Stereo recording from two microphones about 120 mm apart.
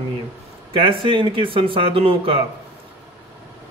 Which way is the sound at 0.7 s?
45° right (ahead or behind).